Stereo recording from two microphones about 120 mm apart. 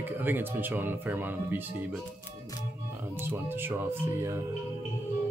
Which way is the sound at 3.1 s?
20° right (ahead or behind).